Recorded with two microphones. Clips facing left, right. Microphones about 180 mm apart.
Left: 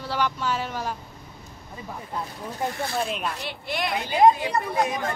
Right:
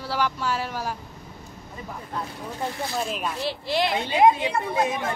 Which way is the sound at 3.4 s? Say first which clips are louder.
Right 5 dB; 30° right (ahead or behind).